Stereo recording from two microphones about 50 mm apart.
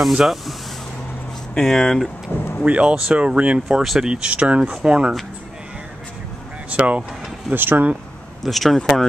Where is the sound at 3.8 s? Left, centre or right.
Centre.